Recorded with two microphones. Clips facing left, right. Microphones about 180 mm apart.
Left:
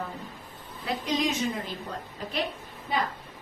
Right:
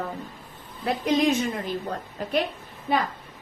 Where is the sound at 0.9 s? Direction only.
55° right (ahead or behind).